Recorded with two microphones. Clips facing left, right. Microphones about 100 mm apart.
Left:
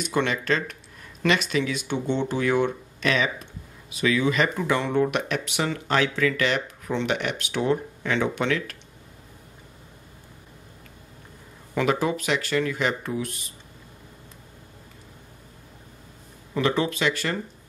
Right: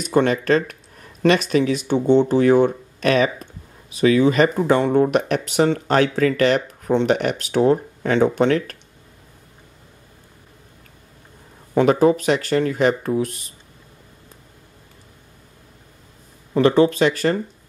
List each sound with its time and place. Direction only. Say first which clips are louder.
0.0 s speech: right 7 dB; 40° right (ahead or behind)
11.7 s speech: right 9 dB; 40° right (ahead or behind)
16.5 s speech: right 9 dB; 40° right (ahead or behind)